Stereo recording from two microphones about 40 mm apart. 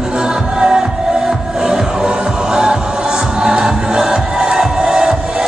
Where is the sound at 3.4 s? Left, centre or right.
Centre.